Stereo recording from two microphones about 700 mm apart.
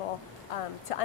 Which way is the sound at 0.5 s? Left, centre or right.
Left.